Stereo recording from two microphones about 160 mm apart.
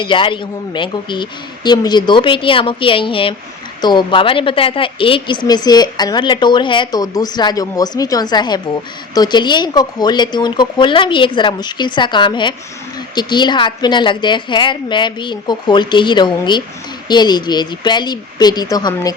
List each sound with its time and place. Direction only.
0.0 s a woman's voice: 30° left (ahead or behind)